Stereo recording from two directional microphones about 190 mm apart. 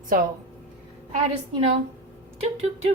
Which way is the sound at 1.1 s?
35° right (ahead or behind).